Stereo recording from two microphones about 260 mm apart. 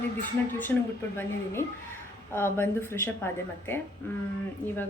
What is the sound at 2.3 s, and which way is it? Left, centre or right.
Speech, centre.